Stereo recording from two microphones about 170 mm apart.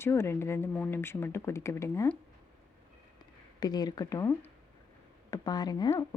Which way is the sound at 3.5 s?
25° left (ahead or behind).